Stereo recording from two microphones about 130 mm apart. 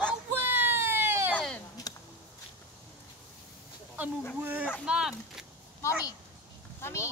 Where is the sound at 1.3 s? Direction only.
5° left (ahead or behind).